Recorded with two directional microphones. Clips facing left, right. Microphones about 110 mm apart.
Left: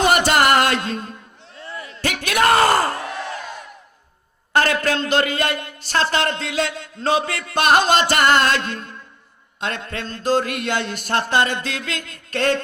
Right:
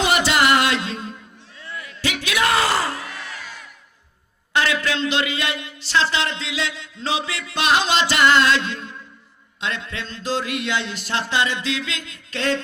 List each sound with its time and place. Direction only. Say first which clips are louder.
0.0 s music: left 3 dB; 50° left (ahead or behind)
1.7 s a sound: left 1 dB; 35° left (ahead or behind)
2.0 s bellow: left 3 dB; 50° left (ahead or behind)
3.1 s crowd: left 7 dB; 35° left (ahead or behind)
4.5 s speech: left 3 dB; 45° left (ahead or behind)